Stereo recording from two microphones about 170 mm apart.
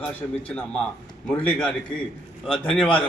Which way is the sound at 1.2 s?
5° left (ahead or behind).